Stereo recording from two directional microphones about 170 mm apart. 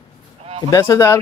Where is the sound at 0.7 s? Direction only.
20° left (ahead or behind).